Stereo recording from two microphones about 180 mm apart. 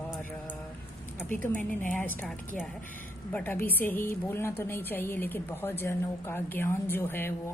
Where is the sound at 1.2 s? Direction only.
45° left (ahead or behind).